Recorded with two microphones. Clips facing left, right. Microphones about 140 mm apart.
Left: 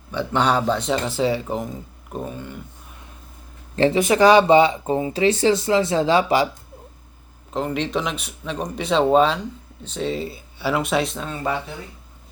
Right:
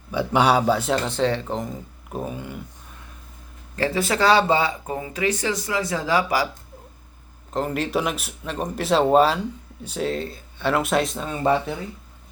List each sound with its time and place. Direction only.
0.1 s speech: 10° right (ahead or behind)
3.8 s speech: 20° left (ahead or behind)
7.5 s speech: centre (ahead or behind)